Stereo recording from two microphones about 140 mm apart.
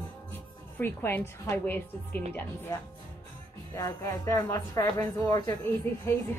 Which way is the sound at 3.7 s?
20° left (ahead or behind).